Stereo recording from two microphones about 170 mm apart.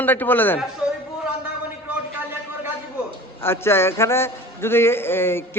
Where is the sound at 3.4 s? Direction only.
15° left (ahead or behind).